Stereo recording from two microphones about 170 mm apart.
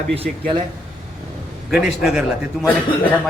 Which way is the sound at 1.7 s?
Centre (ahead or behind).